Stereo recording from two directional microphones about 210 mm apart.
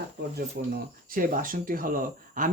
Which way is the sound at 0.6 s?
45° right (ahead or behind).